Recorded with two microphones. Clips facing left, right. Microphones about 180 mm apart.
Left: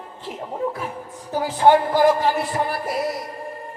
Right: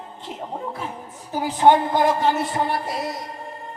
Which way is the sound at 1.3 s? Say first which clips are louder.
Left 1 dB; 15° right (ahead or behind).